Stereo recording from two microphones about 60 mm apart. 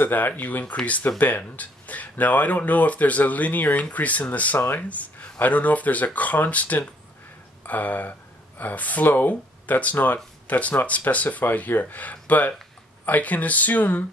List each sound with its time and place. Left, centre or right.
0.0 s speech: left